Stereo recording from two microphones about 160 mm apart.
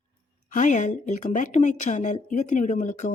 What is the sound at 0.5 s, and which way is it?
Speech, 50° left (ahead or behind).